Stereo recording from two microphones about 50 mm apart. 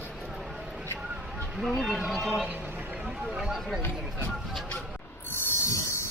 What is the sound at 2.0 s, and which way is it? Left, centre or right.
Speech, centre.